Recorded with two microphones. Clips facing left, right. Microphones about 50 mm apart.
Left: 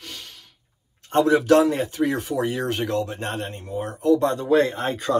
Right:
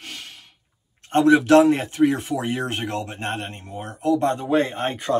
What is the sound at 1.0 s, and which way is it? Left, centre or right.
Speech, right.